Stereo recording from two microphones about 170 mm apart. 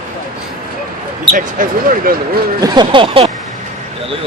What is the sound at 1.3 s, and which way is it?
Speech, 55° right (ahead or behind).